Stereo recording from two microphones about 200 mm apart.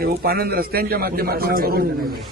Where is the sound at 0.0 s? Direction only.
50° right (ahead or behind).